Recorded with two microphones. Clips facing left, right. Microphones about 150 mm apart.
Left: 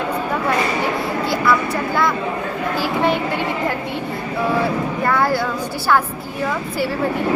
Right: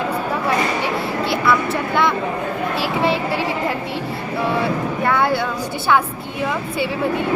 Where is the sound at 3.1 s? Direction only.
30° right (ahead or behind).